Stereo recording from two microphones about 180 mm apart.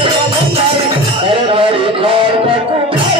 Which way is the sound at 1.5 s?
30° right (ahead or behind).